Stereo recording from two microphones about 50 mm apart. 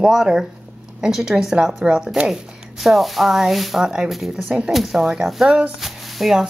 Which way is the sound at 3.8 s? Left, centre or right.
Centre.